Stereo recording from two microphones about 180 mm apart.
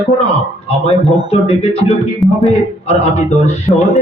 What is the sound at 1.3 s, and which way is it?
Speech, 35° left (ahead or behind).